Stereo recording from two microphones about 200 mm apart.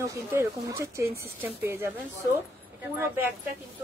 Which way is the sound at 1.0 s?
50° right (ahead or behind).